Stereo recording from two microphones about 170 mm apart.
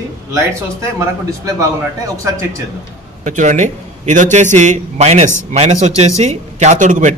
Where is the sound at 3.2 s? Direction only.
45° right (ahead or behind).